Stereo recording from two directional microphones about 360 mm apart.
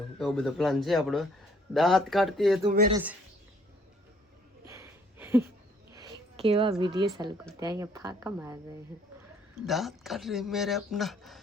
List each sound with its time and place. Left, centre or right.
0.2 s speech: centre
2.6 s speech: right
2.9 s speech: centre
4.6 s a sound: centre
7.6 s speech: centre
9.6 s speech: centre